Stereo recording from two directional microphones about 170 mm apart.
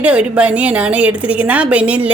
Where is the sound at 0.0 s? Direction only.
5° right (ahead or behind).